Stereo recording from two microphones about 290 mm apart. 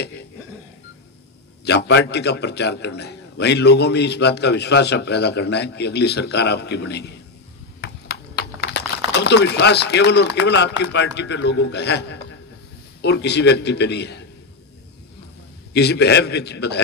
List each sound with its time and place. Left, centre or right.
1.6 s a man's voice: left
7.8 s crumpling: left
10.8 s a man's voice: left
15.7 s a man's voice: left